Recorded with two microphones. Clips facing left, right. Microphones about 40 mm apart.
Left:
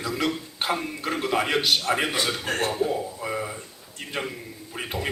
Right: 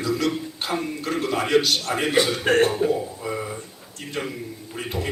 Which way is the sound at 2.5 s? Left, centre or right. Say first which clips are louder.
Right 9 dB; right.